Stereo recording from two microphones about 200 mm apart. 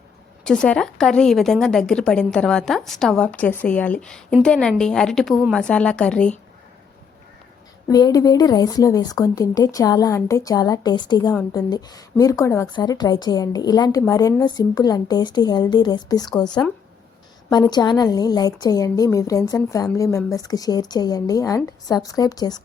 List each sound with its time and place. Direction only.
0.4 s a woman's voice: 5° left (ahead or behind)
7.9 s a woman's voice: 20° left (ahead or behind)
17.5 s a woman's voice: 20° left (ahead or behind)